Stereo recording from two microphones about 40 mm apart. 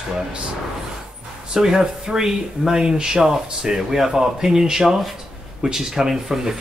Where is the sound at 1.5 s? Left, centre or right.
Centre.